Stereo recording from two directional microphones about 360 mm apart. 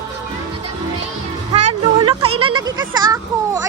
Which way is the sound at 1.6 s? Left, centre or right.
Right.